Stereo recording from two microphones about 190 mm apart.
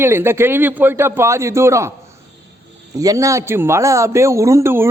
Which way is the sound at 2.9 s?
20° right (ahead or behind).